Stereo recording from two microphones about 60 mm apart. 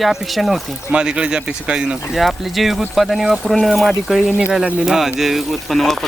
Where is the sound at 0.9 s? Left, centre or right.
Centre.